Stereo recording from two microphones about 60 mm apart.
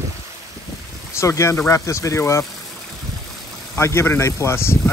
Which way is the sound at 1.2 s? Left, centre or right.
Left.